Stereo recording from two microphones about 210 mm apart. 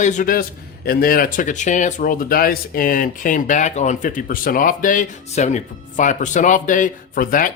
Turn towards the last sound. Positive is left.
turn(degrees=40)  # may be behind; listen again after turning